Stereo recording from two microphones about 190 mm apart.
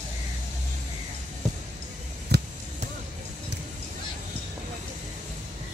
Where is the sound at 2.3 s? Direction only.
60° right (ahead or behind).